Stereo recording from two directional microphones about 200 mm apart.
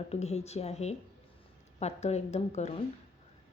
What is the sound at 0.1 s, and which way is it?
Speech, 30° left (ahead or behind).